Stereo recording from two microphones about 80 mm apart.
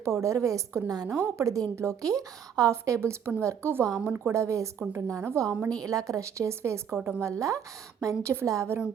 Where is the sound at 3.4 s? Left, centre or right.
Right.